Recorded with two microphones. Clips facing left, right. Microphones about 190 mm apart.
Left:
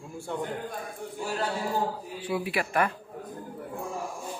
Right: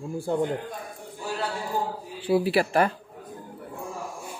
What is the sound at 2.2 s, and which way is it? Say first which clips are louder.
Speech: right 8 dB; 30° right (ahead or behind).